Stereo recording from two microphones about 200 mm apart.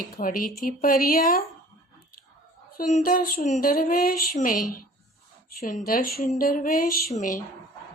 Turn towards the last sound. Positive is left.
turn(degrees=40)  # may be behind; listen again after turning